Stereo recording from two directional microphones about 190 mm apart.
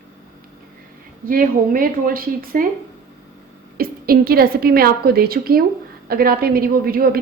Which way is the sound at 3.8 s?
50° right (ahead or behind).